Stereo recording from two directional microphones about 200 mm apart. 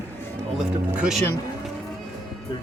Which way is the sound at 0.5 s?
5° right (ahead or behind).